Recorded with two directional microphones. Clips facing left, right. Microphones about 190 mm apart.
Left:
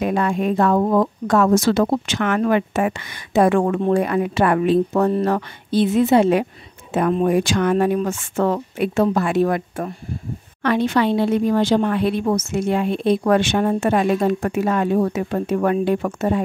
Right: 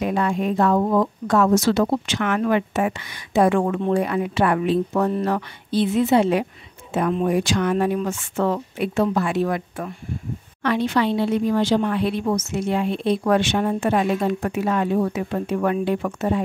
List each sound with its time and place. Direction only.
0.0 s speech: 55° left (ahead or behind)